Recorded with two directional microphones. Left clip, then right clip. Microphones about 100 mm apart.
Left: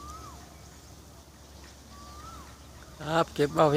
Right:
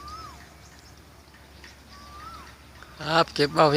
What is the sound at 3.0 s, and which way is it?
Speech, 30° right (ahead or behind).